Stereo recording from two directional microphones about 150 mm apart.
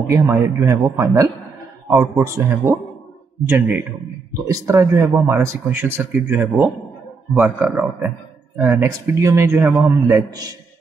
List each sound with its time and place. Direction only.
0.0 s a man's voice: 15° right (ahead or behind)
8.5 s a man's voice: 15° right (ahead or behind)